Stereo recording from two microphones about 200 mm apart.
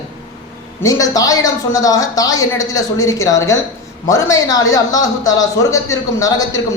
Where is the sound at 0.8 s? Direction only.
15° left (ahead or behind).